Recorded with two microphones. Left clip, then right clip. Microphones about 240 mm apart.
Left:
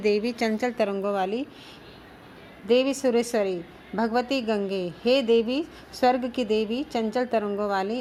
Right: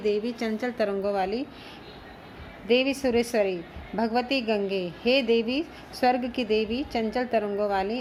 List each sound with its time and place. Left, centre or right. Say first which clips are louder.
0.0 s a woman's voice: left 3 dB; left
2.6 s a woman's voice: left 2 dB; left